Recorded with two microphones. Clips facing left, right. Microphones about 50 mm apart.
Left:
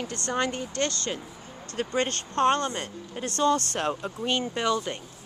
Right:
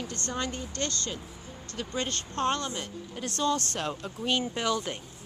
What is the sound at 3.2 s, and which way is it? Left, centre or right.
Speech, left.